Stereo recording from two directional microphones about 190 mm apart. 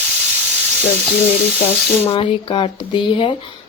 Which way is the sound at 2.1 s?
25° left (ahead or behind).